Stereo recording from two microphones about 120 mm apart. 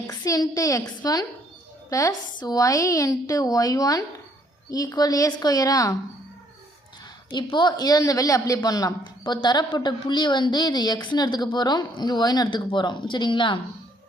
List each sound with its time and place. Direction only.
0.1 s a woman's voice: 30° left (ahead or behind)
7.3 s a woman's voice: 40° left (ahead or behind)